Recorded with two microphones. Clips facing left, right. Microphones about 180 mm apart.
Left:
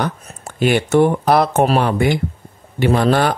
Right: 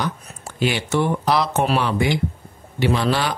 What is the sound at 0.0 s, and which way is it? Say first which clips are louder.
A man's voice: left 4 dB; 55° left (ahead or behind).